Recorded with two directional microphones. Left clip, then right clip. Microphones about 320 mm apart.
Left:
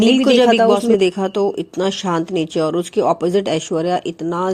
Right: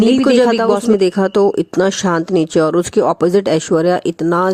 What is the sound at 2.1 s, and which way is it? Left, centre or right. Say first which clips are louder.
Speech: right 4 dB; right.